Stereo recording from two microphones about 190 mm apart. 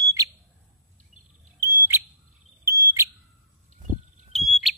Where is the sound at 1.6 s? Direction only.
15° right (ahead or behind).